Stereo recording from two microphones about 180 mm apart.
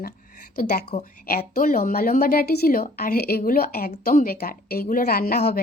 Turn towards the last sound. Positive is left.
turn(degrees=60)  # may be behind; listen again after turning